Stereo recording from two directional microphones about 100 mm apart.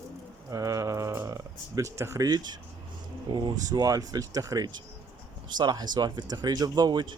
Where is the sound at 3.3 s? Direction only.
50° right (ahead or behind).